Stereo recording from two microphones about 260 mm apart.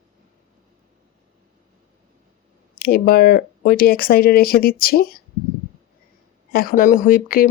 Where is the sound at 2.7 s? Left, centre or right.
Left.